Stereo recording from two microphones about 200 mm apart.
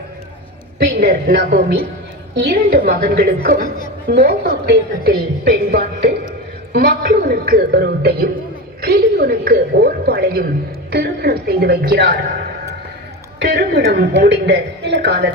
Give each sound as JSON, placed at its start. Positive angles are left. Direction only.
{"t": 0.8, "sound": "a woman's voice", "side_deg": -50}
{"t": 13.6, "sound": "a woman's voice", "side_deg": -55}